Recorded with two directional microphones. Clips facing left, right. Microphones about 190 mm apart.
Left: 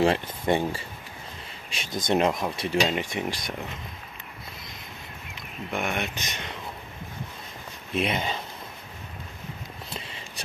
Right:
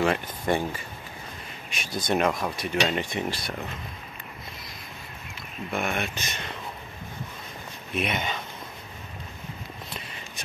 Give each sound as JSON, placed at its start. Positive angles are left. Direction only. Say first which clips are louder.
{"t": 0.0, "sound": "speech", "louder": "left 2 dB", "side_deg": 25}
{"t": 1.7, "sound": "speech", "louder": "left 1 dB", "side_deg": 25}
{"t": 2.9, "sound": "speech", "louder": "even", "side_deg": 10}
{"t": 5.7, "sound": "speech", "louder": "even", "side_deg": 15}
{"t": 7.9, "sound": "speech", "louder": "left 2 dB", "side_deg": 30}
{"t": 9.9, "sound": "a sound", "louder": "left 1 dB", "side_deg": 30}